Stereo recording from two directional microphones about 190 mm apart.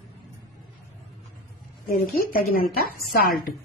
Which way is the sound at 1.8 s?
50° left (ahead or behind).